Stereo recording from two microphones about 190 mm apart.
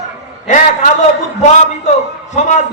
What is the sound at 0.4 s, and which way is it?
Speech, 40° left (ahead or behind).